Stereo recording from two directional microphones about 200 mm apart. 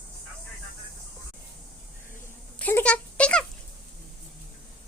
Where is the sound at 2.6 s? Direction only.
10° left (ahead or behind).